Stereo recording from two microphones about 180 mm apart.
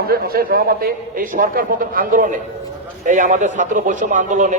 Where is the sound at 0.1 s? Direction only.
55° right (ahead or behind).